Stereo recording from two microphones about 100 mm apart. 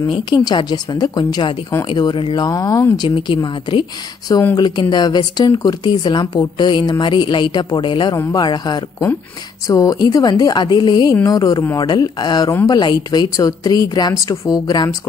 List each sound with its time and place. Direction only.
0.2 s a woman's voice: 45° left (ahead or behind)
14.1 s a woman's voice: 30° left (ahead or behind)